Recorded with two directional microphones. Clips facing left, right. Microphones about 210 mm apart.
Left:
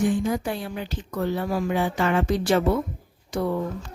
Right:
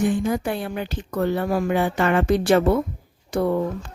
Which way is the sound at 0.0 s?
60° right (ahead or behind).